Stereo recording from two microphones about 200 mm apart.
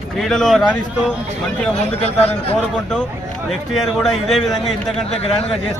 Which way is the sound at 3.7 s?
Centre (ahead or behind).